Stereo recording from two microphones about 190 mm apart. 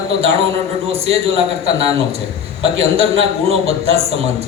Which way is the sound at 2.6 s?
30° right (ahead or behind).